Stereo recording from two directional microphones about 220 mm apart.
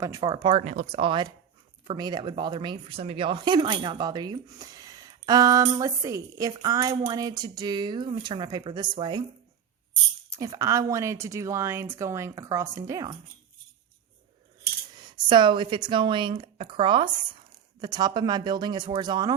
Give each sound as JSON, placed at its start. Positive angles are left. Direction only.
{"t": 0.0, "sound": "speech", "side_deg": -15}
{"t": 10.2, "sound": "speech", "side_deg": -15}
{"t": 14.9, "sound": "speech", "side_deg": -20}